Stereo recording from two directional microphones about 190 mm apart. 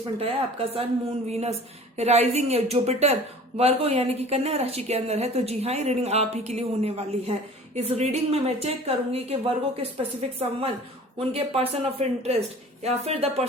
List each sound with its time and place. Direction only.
0.2 s speech: 30° right (ahead or behind)